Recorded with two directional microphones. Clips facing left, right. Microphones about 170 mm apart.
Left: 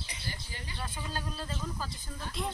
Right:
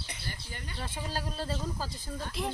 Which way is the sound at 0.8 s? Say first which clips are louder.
Right 2 dB; 30° right (ahead or behind).